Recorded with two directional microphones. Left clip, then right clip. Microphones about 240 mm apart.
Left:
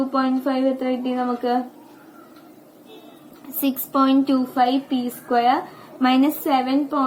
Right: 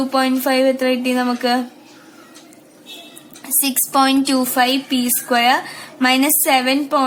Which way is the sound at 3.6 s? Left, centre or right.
Right.